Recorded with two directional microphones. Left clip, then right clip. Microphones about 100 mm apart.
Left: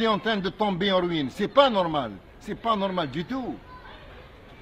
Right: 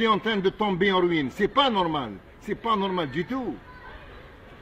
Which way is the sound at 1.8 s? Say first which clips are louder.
Left 1 dB; 40° left (ahead or behind).